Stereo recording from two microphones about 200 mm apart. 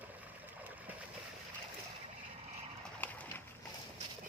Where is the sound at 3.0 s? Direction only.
10° left (ahead or behind).